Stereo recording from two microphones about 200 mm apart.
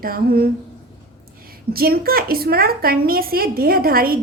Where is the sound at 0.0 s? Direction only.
45° right (ahead or behind).